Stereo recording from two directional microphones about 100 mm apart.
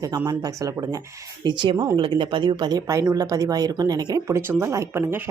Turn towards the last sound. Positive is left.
turn(degrees=-25)  # may be behind; listen again after turning